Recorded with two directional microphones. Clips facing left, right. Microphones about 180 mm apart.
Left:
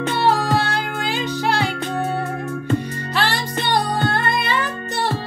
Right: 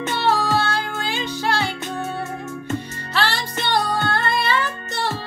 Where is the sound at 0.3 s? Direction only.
15° left (ahead or behind).